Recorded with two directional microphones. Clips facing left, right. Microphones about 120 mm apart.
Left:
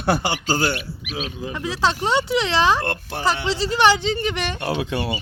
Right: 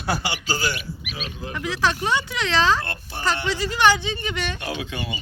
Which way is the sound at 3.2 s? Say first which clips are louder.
Left 3 dB; 25° left (ahead or behind).